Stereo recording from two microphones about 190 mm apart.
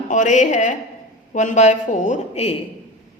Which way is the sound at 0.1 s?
40° left (ahead or behind).